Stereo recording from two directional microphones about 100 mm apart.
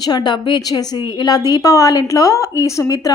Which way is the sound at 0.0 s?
45° left (ahead or behind).